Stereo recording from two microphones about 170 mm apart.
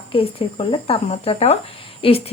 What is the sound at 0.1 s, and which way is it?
Speech, 30° left (ahead or behind).